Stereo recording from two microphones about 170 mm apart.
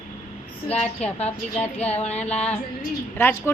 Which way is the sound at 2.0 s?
40° left (ahead or behind).